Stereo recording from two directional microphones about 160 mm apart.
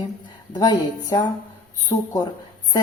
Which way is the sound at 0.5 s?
25° left (ahead or behind).